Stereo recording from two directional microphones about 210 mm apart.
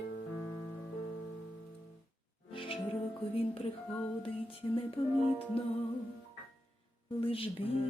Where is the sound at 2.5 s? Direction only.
25° left (ahead or behind).